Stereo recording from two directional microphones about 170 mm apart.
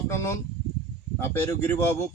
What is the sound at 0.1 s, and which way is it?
A man's voice, 15° left (ahead or behind).